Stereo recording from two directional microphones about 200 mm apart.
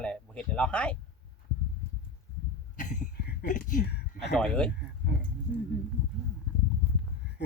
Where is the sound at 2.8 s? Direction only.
40° left (ahead or behind).